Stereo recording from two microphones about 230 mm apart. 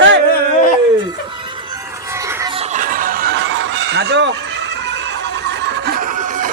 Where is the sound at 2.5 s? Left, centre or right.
Right.